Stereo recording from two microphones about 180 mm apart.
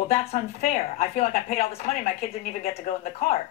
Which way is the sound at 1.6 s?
35° left (ahead or behind).